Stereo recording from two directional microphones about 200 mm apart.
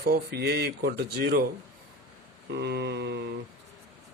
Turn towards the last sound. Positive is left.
turn(degrees=-55)  # may be behind; listen again after turning